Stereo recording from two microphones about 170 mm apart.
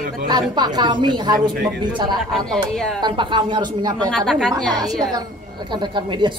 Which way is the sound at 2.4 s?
5° left (ahead or behind).